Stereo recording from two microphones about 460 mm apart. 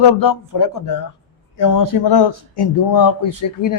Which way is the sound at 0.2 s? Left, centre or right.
Left.